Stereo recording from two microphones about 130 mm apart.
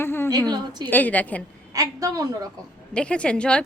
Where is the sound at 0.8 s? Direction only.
15° left (ahead or behind).